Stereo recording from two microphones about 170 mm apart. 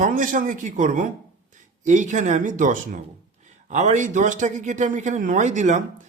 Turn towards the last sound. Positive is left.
turn(degrees=-45)  # may be behind; listen again after turning